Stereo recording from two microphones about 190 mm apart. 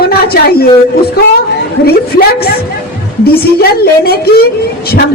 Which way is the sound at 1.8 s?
55° left (ahead or behind).